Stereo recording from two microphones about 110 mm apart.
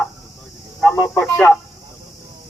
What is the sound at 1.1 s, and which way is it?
Speech, 5° left (ahead or behind).